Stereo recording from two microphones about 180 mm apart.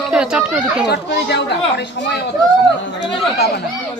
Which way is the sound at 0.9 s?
70° left (ahead or behind).